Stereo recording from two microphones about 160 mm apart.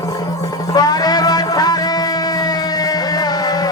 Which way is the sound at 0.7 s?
25° left (ahead or behind).